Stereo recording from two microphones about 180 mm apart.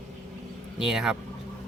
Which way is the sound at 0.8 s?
Centre (ahead or behind).